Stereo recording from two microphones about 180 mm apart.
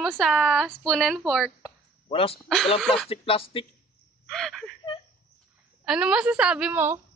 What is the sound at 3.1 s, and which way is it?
Speech, 30° left (ahead or behind).